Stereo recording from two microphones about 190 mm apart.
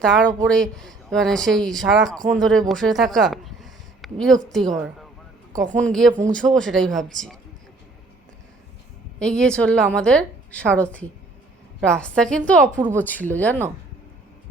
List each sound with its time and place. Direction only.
0.0 s speech: 5° left (ahead or behind)
5.5 s a woman's voice: 40° right (ahead or behind)
5.8 s speech: centre (ahead or behind)
9.1 s speech: 5° left (ahead or behind)